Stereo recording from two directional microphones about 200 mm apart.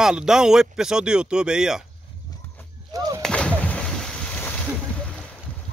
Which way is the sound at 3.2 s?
5° left (ahead or behind).